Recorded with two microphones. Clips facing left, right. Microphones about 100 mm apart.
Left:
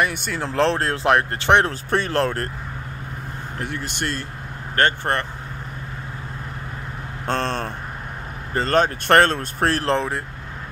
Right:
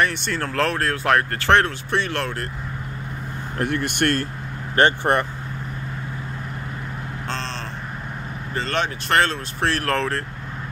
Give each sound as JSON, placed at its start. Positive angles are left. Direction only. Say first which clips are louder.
{"t": 0.0, "sound": "speech", "louder": "right 1 dB", "side_deg": 10}
{"t": 0.4, "sound": "speech", "louder": "left 3 dB", "side_deg": 20}
{"t": 1.7, "sound": "speech", "louder": "left 2 dB", "side_deg": 40}
{"t": 3.5, "sound": "speech", "louder": "right 7 dB", "side_deg": -55}
{"t": 4.7, "sound": "speech", "louder": "right 3 dB", "side_deg": -15}
{"t": 7.2, "sound": "speech", "louder": "left 8 dB", "side_deg": 55}
{"t": 9.8, "sound": "speech", "louder": "left 1 dB", "side_deg": 15}